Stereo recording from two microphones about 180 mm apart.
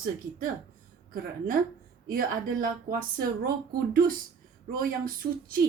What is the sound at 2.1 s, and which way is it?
Speech, 50° right (ahead or behind).